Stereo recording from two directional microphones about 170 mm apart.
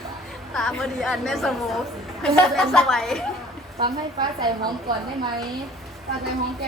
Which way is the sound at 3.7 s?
25° right (ahead or behind).